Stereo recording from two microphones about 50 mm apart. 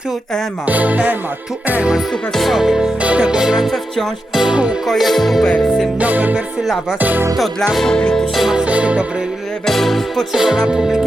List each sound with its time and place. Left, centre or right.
0.7 s music: right
2.3 s music: centre
3.0 s music: right
3.7 s music: centre
4.4 s music: centre
4.9 s music: centre
6.0 s music: right
7.3 s music: centre
7.9 s music: centre
8.4 s music: centre
8.6 s music: right
9.6 s music: centre